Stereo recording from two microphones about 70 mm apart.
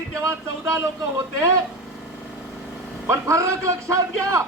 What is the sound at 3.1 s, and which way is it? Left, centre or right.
Speech, right.